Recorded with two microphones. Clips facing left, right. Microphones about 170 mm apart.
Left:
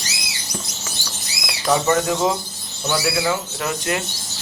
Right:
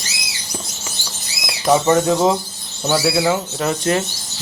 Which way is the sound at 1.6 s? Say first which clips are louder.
Right 4 dB; 20° right (ahead or behind).